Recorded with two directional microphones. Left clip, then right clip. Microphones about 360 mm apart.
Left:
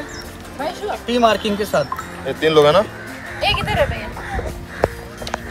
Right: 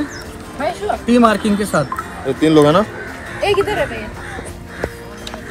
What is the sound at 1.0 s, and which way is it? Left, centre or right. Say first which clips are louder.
Speech: right 2 dB; left.